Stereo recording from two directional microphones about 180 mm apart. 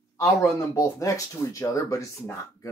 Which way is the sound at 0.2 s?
15° left (ahead or behind).